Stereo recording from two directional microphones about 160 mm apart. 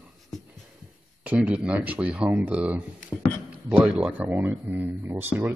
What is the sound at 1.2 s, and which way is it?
Speech, 10° right (ahead or behind).